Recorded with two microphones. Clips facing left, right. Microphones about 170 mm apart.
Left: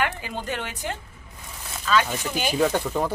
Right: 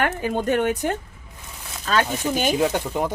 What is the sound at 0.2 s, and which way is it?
Speech, 50° right (ahead or behind).